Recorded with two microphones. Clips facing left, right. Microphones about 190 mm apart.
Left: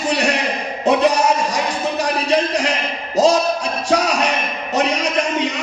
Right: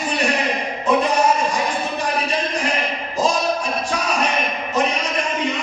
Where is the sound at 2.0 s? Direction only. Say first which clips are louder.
Left 7 dB; 75° left (ahead or behind).